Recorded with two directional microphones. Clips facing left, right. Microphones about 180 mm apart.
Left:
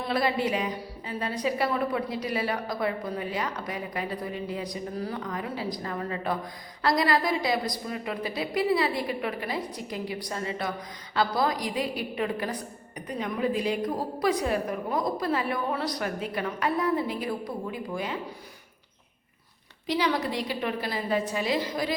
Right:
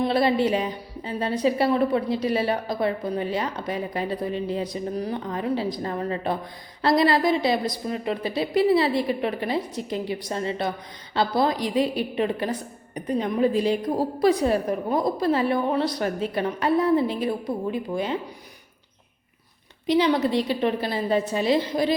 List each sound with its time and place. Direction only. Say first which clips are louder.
0.0 s a woman's voice: right 6 dB; 30° right (ahead or behind)
19.9 s a woman's voice: right 7 dB; 20° right (ahead or behind)